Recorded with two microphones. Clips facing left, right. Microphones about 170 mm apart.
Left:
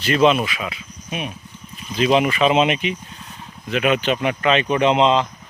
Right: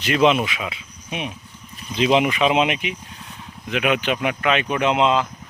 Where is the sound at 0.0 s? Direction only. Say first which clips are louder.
Left 1 dB; 15° right (ahead or behind).